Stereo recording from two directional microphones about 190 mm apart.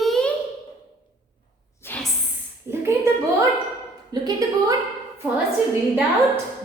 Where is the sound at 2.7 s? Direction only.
15° right (ahead or behind).